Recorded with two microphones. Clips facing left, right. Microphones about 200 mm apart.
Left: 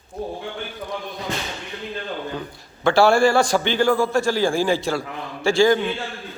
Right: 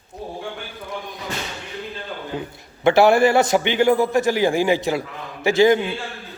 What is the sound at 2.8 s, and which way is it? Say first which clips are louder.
A man's voice: right 2 dB; 20° right (ahead or behind).